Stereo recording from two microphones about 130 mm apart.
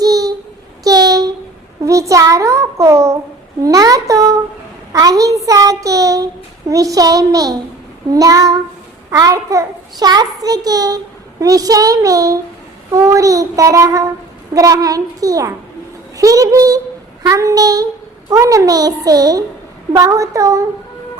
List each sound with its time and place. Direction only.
0.0 s child singing: 30° right (ahead or behind)
0.9 s a sound: 30° right (ahead or behind)
1.8 s a child's voice: 25° right (ahead or behind)